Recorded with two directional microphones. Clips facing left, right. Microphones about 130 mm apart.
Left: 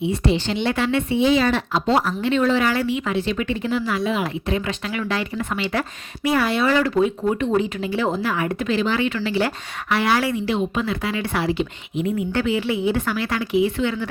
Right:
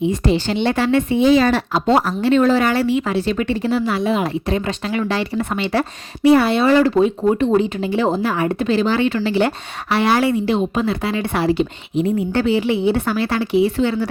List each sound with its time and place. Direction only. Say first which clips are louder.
0.0 s speech: right 3 dB; 40° right (ahead or behind)